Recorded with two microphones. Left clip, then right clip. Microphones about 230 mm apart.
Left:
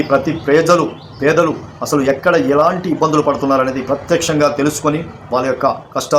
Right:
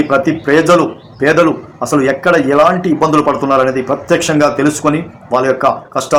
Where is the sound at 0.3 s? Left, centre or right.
Centre.